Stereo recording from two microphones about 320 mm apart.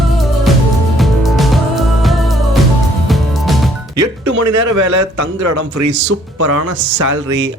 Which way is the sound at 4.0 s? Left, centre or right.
Right.